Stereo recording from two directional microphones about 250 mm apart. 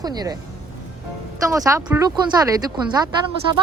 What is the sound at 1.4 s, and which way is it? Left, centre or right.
Speech, centre.